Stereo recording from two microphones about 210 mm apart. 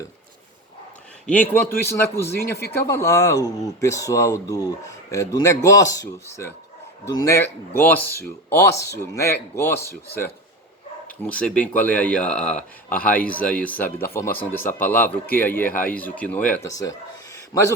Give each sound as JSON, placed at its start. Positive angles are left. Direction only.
{"t": 1.3, "sound": "speech", "side_deg": 10}
{"t": 11.2, "sound": "speech", "side_deg": 5}
{"t": 12.5, "sound": "speech", "side_deg": 35}
{"t": 13.1, "sound": "speech", "side_deg": 5}
{"t": 17.3, "sound": "a sound", "side_deg": 15}